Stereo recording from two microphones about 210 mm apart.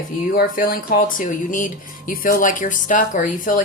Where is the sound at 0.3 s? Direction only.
40° left (ahead or behind).